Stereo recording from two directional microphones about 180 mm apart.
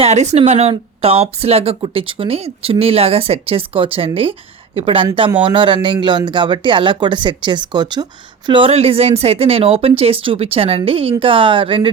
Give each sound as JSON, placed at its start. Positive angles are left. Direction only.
{"t": 0.0, "sound": "a woman's voice", "side_deg": -40}